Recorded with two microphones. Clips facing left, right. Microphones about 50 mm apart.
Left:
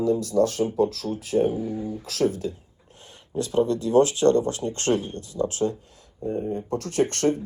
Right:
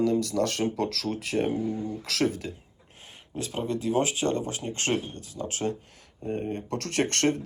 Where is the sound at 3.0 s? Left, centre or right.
Right.